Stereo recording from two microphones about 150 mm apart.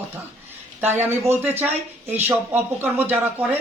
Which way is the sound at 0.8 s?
15° right (ahead or behind).